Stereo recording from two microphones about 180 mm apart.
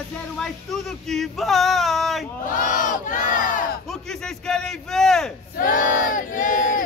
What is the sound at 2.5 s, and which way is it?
Battle cry, 45° left (ahead or behind).